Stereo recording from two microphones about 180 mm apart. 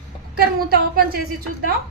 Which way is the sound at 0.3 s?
55° right (ahead or behind).